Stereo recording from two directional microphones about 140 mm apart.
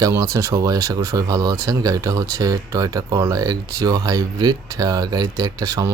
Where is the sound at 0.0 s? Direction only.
25° right (ahead or behind).